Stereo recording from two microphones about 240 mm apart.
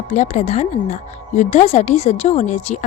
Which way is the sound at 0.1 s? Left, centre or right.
Left.